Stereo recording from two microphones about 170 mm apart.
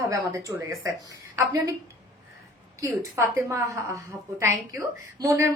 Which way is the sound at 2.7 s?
15° right (ahead or behind).